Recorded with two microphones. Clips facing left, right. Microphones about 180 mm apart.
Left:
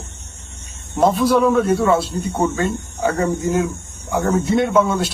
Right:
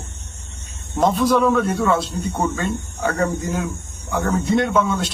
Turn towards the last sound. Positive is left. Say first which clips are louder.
# left 3 dB
turn(degrees=0)  # may be behind; listen again after turning